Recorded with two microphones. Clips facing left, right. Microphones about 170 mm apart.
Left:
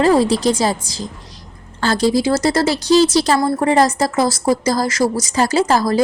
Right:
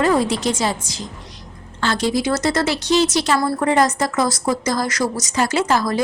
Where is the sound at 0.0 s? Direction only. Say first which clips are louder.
Left 4 dB; 35° left (ahead or behind).